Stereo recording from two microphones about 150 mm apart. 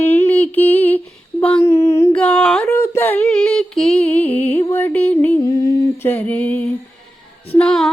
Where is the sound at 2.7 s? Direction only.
15° left (ahead or behind).